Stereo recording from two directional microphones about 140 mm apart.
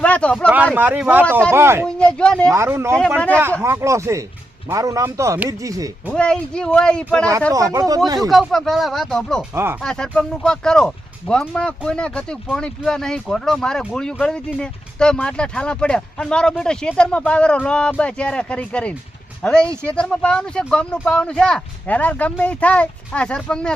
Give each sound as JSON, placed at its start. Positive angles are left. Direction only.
{"t": 0.0, "sound": "speech", "side_deg": 10}
{"t": 0.5, "sound": "speech", "side_deg": -10}
{"t": 1.9, "sound": "speech", "side_deg": 5}
{"t": 2.5, "sound": "speech", "side_deg": -20}
{"t": 3.2, "sound": "speech", "side_deg": 10}
{"t": 3.6, "sound": "speech", "side_deg": -20}
{"t": 6.1, "sound": "speech", "side_deg": 5}
{"t": 7.5, "sound": "speech", "side_deg": -25}
{"t": 8.3, "sound": "speech", "side_deg": 0}